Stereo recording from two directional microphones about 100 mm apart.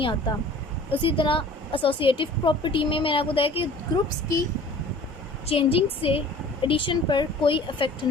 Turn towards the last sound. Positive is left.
turn(degrees=55)  # may be behind; listen again after turning